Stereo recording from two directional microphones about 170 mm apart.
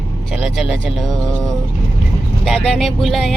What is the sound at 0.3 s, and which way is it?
Music, centre (ahead or behind).